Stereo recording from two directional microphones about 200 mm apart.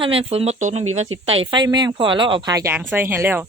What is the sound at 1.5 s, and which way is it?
Speech, 20° right (ahead or behind).